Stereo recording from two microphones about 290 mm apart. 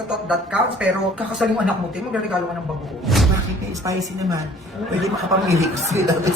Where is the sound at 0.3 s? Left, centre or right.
Centre.